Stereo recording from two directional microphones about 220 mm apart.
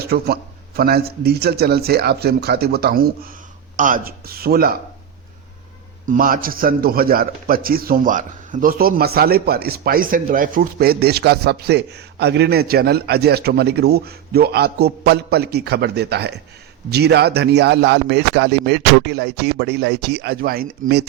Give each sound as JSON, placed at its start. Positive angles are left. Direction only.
{"t": 0.0, "sound": "a man's voice", "side_deg": -45}
{"t": 6.1, "sound": "a man's voice", "side_deg": -40}